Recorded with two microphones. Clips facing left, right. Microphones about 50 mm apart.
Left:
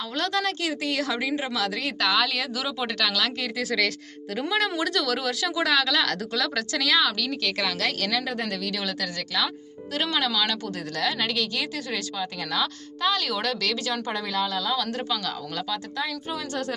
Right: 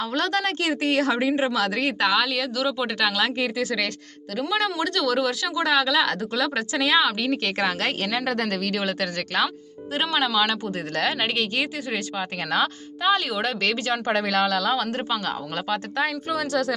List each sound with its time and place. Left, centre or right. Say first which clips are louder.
0.2 s speech: right 1 dB; right
2.1 s speech: right 2 dB; centre
3.0 s speech: right 4 dB; right
3.6 s speech: even; centre
5.7 s speech: right 5 dB; centre; by 8.0 s right
8.2 s speech: right 5 dB; right
8.4 s speech: right 4 dB; right
10.0 s speech: right 3 dB; centre
10.9 s speech: right 2 dB; right
13.0 s speech: right 3 dB; right
14.1 s speech: right 8 dB; right
14.8 s speech: right 3 dB; right